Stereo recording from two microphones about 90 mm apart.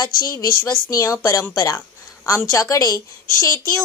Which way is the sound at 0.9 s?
35° left (ahead or behind).